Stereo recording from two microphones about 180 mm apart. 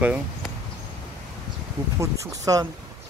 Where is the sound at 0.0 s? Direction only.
10° right (ahead or behind).